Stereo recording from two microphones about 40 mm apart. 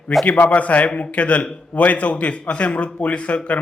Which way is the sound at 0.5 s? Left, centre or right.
Left.